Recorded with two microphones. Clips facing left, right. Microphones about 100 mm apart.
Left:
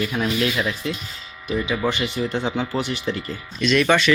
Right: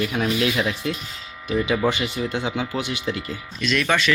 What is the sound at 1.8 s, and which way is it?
Speech, 10° right (ahead or behind).